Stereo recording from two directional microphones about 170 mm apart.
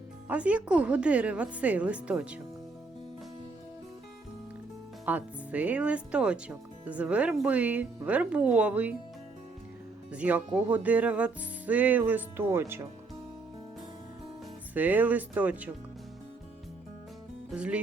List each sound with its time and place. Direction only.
0.3 s speech: 10° right (ahead or behind)
5.0 s speech: 10° right (ahead or behind)
10.1 s speech: 10° right (ahead or behind)
14.7 s speech: 10° right (ahead or behind)
17.5 s speech: 5° right (ahead or behind)